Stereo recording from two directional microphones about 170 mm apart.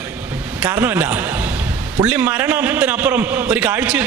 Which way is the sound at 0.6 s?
20° right (ahead or behind).